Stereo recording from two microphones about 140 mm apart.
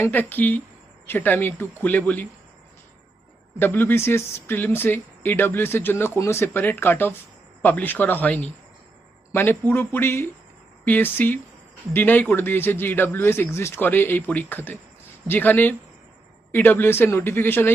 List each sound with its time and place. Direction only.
0.0 s speech: 15° left (ahead or behind)
3.6 s speech: 15° left (ahead or behind)